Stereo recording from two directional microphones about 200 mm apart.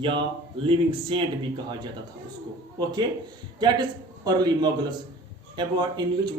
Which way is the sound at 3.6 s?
20° right (ahead or behind).